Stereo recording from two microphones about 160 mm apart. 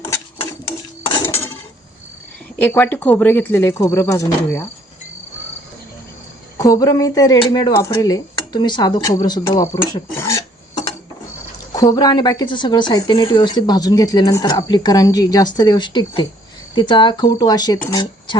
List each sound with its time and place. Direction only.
2.6 s speech: 15° left (ahead or behind)
6.6 s a woman's voice: 20° left (ahead or behind)
9.7 s speech: 15° left (ahead or behind)
11.7 s a woman's voice: 25° left (ahead or behind)